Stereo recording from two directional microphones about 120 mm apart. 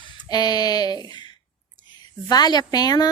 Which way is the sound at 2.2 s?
35° left (ahead or behind).